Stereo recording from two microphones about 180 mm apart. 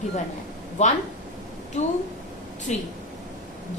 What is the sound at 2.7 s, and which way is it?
Speech, 40° left (ahead or behind).